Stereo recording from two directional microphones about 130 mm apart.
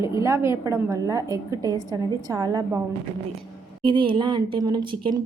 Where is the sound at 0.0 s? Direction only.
25° right (ahead or behind).